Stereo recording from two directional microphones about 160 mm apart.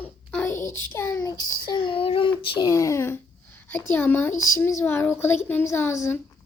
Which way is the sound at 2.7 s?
20° left (ahead or behind).